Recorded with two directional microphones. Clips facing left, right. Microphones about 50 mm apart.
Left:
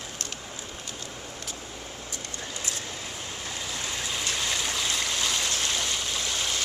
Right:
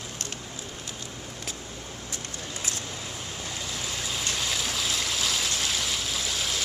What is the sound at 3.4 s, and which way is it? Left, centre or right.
Stream, centre.